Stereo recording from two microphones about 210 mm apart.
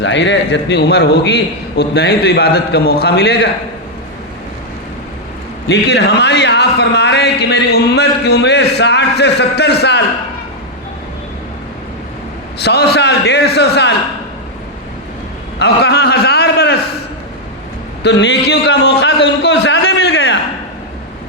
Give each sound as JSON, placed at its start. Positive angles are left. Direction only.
{"t": 0.0, "sound": "a man's voice", "side_deg": 55}
{"t": 5.6, "sound": "a man's voice", "side_deg": 55}
{"t": 12.5, "sound": "a man's voice", "side_deg": 50}
{"t": 15.5, "sound": "a sound", "side_deg": 50}
{"t": 18.0, "sound": "a man's voice", "side_deg": 55}